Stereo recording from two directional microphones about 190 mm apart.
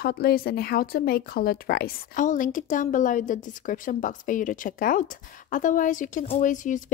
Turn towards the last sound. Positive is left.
turn(degrees=40)  # may be behind; listen again after turning